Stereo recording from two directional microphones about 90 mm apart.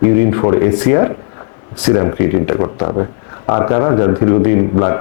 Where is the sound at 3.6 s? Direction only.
30° left (ahead or behind).